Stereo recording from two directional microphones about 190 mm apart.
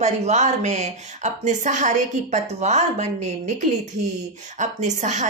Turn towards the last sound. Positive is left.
turn(degrees=-40)  # may be behind; listen again after turning